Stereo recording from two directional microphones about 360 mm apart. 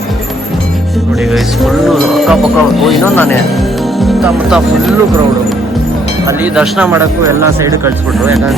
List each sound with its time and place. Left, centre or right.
1.3 s speech: centre
6.2 s speech: centre